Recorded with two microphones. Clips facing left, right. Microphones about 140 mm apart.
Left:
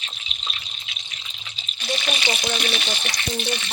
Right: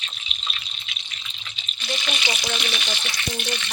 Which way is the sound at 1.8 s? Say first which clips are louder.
Left 3 dB; 25° left (ahead or behind).